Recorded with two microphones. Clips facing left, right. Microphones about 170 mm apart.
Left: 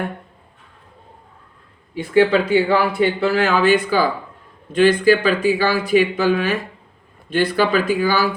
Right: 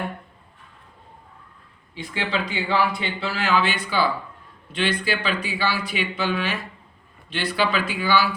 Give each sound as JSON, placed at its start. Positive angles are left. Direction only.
{"t": 2.0, "sound": "speech", "side_deg": 55}